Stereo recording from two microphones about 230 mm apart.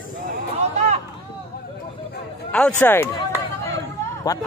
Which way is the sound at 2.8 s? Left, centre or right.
Centre.